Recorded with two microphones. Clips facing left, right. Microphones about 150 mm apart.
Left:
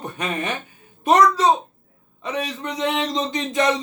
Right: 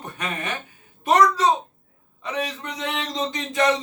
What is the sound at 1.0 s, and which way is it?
A man's voice, 20° left (ahead or behind).